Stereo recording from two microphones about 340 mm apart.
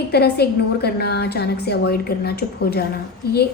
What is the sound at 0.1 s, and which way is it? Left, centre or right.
A woman's voice, left.